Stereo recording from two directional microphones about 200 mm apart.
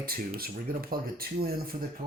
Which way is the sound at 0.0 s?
45° right (ahead or behind).